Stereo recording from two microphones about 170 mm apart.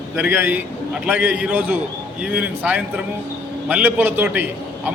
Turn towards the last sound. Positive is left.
turn(degrees=-10)  # may be behind; listen again after turning